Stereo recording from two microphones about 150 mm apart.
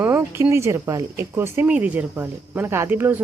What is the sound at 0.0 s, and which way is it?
Speech, 15° right (ahead or behind).